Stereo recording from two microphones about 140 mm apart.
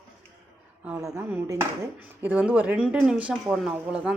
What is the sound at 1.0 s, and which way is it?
Dishes, 20° right (ahead or behind).